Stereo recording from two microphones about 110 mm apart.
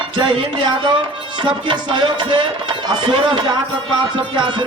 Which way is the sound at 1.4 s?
45° right (ahead or behind).